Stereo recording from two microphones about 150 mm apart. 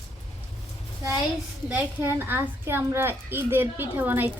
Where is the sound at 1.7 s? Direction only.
15° right (ahead or behind).